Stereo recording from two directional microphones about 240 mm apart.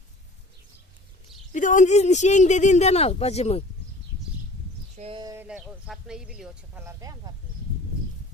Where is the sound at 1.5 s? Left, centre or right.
Left.